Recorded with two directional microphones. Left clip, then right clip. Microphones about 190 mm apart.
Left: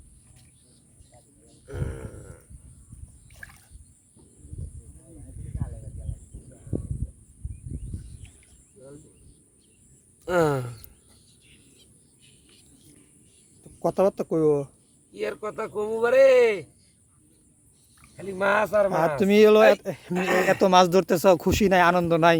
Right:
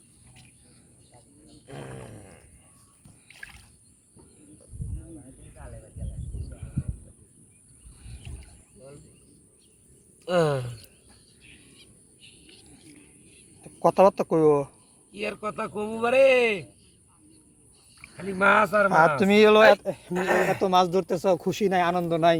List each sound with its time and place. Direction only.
3.2 s a sound: 5° left (ahead or behind)
10.2 s speech: 45° left (ahead or behind)
13.6 s speech: 15° left (ahead or behind)
18.2 s speech: 15° left (ahead or behind)
19.8 s speech: 45° left (ahead or behind)